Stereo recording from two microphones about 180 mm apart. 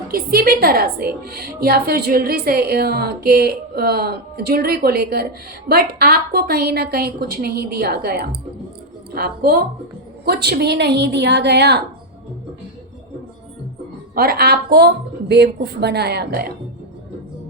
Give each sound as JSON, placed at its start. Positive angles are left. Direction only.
{"t": 0.1, "sound": "a woman's voice", "side_deg": -55}
{"t": 14.2, "sound": "a woman's voice", "side_deg": -55}